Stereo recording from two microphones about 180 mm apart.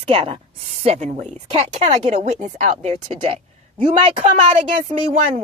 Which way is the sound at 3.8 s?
30° right (ahead or behind).